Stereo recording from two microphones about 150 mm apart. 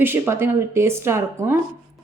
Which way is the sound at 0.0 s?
15° right (ahead or behind).